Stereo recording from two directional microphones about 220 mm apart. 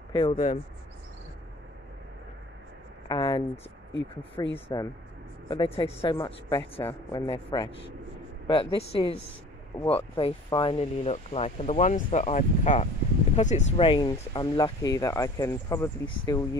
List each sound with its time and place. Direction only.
0.1 s speech: 20° left (ahead or behind)
3.1 s a sound: 20° left (ahead or behind)
4.1 s speech: 25° left (ahead or behind)